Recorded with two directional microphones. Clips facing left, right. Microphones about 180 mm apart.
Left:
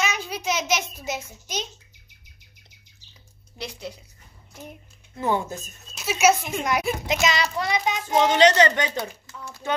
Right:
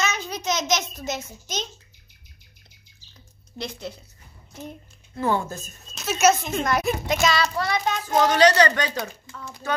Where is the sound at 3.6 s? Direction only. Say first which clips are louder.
Right 2 dB; 10° left (ahead or behind).